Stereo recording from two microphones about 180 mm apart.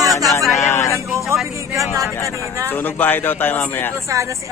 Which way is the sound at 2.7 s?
10° left (ahead or behind).